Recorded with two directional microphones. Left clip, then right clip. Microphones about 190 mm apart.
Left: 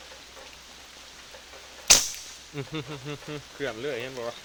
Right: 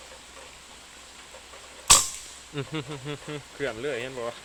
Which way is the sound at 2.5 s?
20° right (ahead or behind).